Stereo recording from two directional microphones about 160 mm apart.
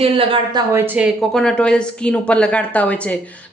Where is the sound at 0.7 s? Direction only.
10° right (ahead or behind).